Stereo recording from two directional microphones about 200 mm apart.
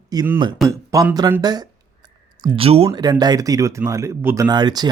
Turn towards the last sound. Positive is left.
turn(degrees=-20)  # may be behind; listen again after turning